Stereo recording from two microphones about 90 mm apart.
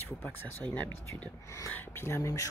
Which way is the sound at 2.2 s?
40° left (ahead or behind).